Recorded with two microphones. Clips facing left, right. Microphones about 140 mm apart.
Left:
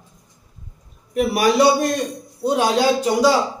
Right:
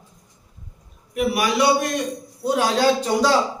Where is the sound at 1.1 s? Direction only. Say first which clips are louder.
Left 4 dB; 35° left (ahead or behind).